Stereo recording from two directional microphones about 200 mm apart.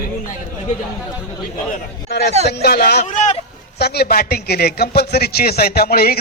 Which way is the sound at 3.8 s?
50° left (ahead or behind).